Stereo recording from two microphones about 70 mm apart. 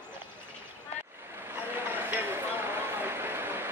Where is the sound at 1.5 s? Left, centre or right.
Right.